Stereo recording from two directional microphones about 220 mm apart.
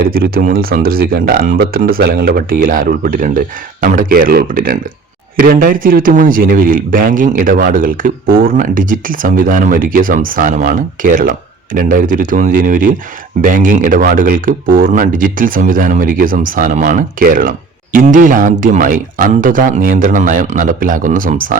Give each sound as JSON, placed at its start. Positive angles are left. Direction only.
{"t": 0.0, "sound": "speech", "side_deg": -40}